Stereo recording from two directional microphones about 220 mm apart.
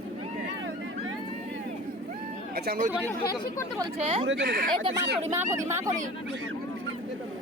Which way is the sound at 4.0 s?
30° right (ahead or behind).